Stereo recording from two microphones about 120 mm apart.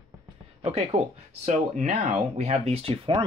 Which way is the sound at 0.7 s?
65° right (ahead or behind).